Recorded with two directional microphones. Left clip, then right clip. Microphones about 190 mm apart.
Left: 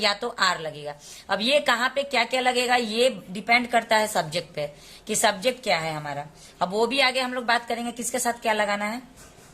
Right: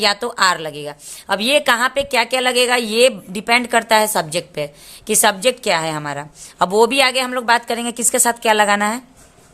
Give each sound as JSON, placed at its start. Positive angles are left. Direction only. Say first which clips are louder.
{"t": 0.0, "sound": "a woman's voice", "louder": "right 7 dB", "side_deg": -40}